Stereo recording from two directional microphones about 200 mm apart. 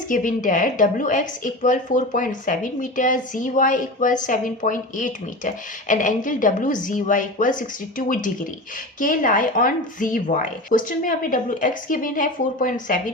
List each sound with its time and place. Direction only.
0.1 s a woman's voice: 40° left (ahead or behind)